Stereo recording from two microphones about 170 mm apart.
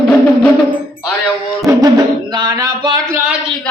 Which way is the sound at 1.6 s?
20° right (ahead or behind).